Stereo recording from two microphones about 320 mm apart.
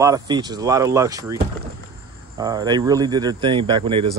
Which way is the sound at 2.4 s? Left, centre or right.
Centre.